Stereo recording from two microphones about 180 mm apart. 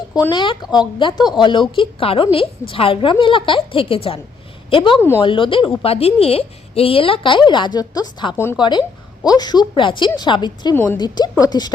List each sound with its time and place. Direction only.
0.1 s speech: 25° left (ahead or behind)
4.9 s speech: 15° left (ahead or behind)
5.2 s speech: 30° left (ahead or behind)